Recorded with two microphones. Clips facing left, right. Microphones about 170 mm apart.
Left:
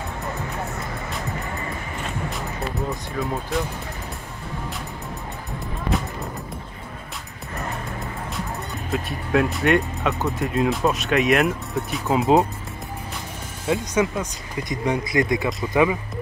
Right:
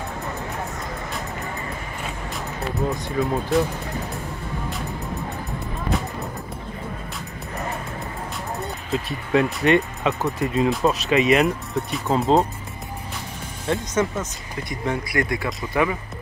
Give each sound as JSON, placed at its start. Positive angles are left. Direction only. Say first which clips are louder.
{"t": 3.1, "sound": "speech", "louder": "right 4 dB", "side_deg": 0}
{"t": 8.9, "sound": "speech", "louder": "right 1 dB", "side_deg": 0}
{"t": 13.7, "sound": "speech", "louder": "left 1 dB", "side_deg": 10}